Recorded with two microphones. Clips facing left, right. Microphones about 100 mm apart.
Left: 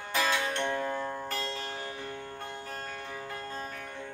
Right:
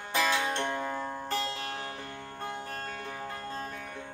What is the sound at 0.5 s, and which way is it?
Music, 15° right (ahead or behind).